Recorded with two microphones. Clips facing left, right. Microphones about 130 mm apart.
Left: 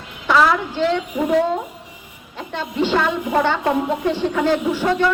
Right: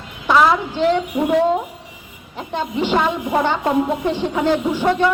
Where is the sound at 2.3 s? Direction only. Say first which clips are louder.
Right 3 dB; 15° right (ahead or behind).